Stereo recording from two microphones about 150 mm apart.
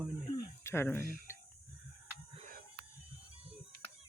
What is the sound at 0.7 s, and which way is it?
Speech, 15° left (ahead or behind).